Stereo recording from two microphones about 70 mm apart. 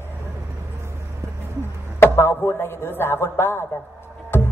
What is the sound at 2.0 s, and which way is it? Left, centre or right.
A man's voice, left.